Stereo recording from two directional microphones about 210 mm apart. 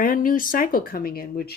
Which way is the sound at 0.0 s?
40° left (ahead or behind).